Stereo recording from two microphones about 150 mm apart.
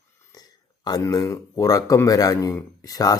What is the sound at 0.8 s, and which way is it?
Speech, 25° left (ahead or behind).